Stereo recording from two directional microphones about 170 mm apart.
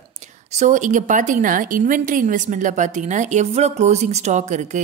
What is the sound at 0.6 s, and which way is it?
A woman's voice, 45° right (ahead or behind).